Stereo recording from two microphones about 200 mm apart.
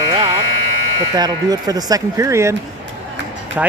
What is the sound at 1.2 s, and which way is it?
Speech, 20° right (ahead or behind).